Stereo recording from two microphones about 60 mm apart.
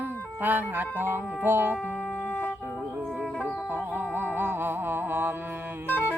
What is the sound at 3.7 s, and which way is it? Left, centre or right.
Music, right.